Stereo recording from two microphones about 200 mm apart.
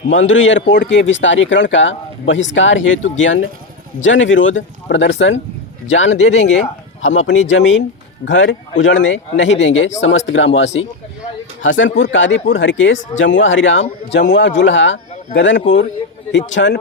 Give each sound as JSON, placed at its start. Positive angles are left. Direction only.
{"t": 0.1, "sound": "speech", "side_deg": 70}